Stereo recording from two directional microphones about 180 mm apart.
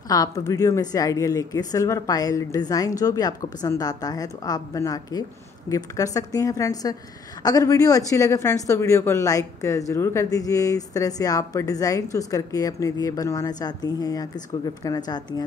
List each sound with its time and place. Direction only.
0.1 s speech: 20° left (ahead or behind)